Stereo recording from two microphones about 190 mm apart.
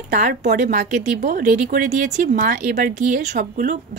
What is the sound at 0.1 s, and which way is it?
Speech, 40° right (ahead or behind).